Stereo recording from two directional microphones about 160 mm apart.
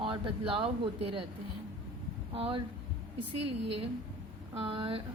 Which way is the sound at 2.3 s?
35° right (ahead or behind).